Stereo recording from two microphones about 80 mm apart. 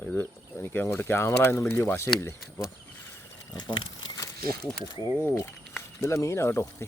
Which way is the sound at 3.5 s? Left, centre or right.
Left.